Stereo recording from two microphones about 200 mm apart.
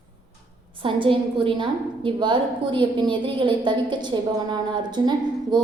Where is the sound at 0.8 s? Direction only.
25° right (ahead or behind).